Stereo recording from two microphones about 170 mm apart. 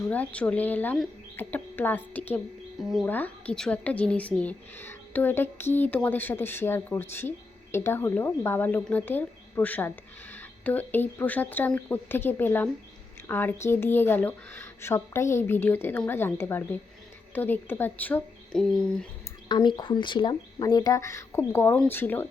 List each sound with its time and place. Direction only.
0.1 s speech: 10° left (ahead or behind)
19.5 s speech: 25° left (ahead or behind); by 22.3 s 10° left (ahead or behind)